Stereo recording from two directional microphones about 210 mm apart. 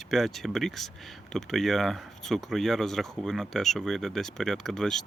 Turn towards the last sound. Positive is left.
turn(degrees=0)  # may be behind; listen again after turning